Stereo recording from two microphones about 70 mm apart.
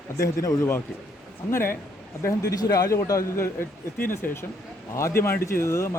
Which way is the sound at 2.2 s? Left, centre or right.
Left.